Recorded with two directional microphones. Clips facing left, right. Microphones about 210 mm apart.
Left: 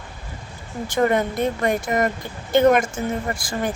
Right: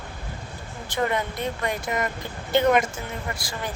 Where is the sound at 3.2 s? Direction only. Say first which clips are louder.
Left 7 dB; 45° left (ahead or behind).